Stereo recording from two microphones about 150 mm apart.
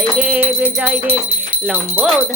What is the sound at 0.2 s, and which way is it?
Music, 10° right (ahead or behind).